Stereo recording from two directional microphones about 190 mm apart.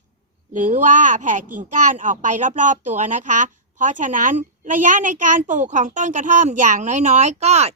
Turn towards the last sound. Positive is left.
turn(degrees=-35)  # may be behind; listen again after turning